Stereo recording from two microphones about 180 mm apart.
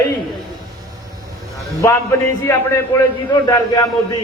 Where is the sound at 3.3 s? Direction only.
20° left (ahead or behind).